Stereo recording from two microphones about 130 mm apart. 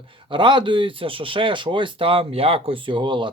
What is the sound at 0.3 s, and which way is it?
A man's voice, 35° right (ahead or behind).